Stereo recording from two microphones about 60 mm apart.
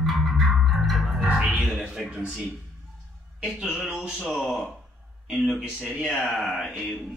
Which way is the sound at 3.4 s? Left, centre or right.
Centre.